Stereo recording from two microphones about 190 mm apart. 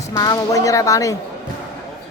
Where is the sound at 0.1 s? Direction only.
20° left (ahead or behind).